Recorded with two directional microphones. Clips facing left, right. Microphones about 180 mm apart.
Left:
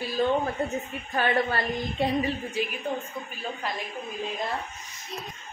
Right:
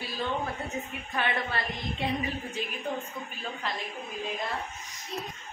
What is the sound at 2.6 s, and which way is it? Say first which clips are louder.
Speech: left 8 dB; 10° left (ahead or behind).